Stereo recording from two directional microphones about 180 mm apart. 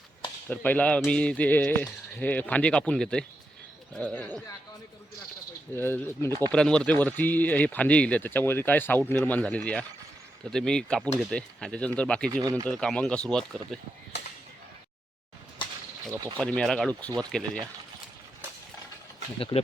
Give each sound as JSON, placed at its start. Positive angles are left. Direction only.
{"t": 0.4, "sound": "speech", "side_deg": 10}
{"t": 5.7, "sound": "speech", "side_deg": 10}
{"t": 12.3, "sound": "speech", "side_deg": -20}
{"t": 12.6, "sound": "speech", "side_deg": 5}
{"t": 16.4, "sound": "speech", "side_deg": 5}
{"t": 19.4, "sound": "speech", "side_deg": 30}